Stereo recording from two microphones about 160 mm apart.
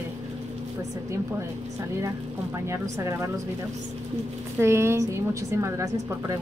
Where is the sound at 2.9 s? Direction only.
20° right (ahead or behind).